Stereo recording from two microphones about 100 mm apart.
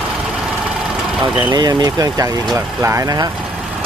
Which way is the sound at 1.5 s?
45° right (ahead or behind).